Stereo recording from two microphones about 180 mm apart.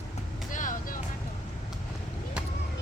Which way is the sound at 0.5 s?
45° left (ahead or behind).